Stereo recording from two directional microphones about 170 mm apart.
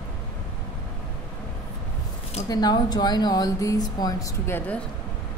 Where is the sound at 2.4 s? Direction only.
25° left (ahead or behind).